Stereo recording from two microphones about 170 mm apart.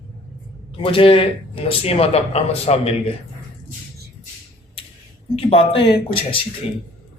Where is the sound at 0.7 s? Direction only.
30° left (ahead or behind).